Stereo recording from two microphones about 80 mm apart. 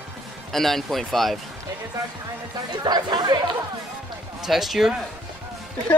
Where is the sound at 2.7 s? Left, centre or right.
Right.